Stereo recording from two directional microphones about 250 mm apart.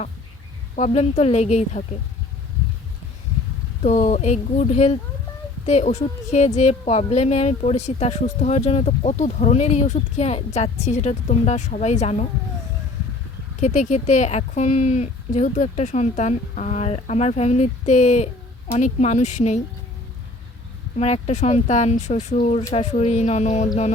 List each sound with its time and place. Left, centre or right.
0.8 s a woman's voice: left
3.8 s a woman's voice: left
13.6 s a woman's voice: left
20.9 s a woman's voice: left